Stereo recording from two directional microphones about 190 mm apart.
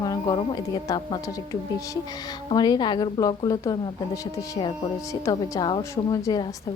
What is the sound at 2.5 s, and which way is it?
Speech, 20° left (ahead or behind).